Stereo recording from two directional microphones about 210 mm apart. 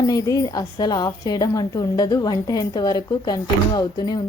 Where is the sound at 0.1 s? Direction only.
15° left (ahead or behind).